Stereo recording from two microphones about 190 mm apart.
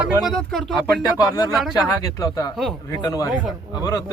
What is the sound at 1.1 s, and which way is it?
Speech, 20° left (ahead or behind).